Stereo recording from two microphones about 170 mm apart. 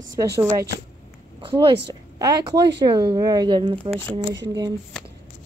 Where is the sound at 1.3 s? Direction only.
30° right (ahead or behind).